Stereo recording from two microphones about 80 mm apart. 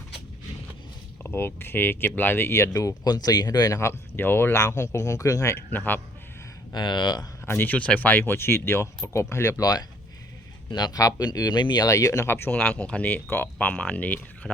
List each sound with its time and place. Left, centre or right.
1.2 s speech: left
3.7 s speech: left
4.5 s speech: left
5.7 s speech: left
6.7 s speech: left
7.4 s speech: left
9.6 s speech: left
10.7 s speech: left
11.9 s speech: left
12.3 s speech: left